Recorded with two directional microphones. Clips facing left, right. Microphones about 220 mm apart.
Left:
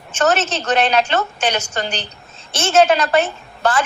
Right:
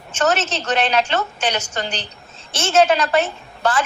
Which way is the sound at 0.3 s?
50° left (ahead or behind).